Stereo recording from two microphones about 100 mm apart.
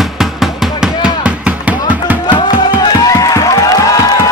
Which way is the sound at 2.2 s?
45° left (ahead or behind).